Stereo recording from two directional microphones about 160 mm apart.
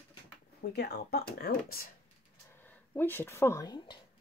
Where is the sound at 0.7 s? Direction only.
90° left.